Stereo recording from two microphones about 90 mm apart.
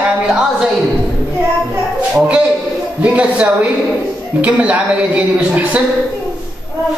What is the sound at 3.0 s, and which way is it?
A woman's voice, 15° right (ahead or behind).